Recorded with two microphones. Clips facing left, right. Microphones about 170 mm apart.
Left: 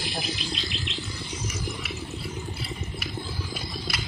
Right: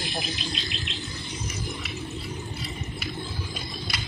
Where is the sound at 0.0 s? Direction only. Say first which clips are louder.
Even; 20° right (ahead or behind).